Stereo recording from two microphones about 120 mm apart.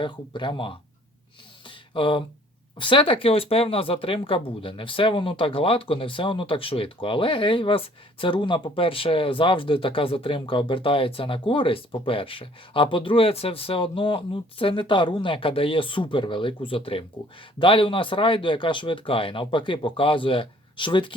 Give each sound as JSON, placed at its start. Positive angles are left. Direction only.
{"t": 0.0, "sound": "speech", "side_deg": 40}
{"t": 1.6, "sound": "a sound", "side_deg": 45}
{"t": 2.7, "sound": "speech", "side_deg": 45}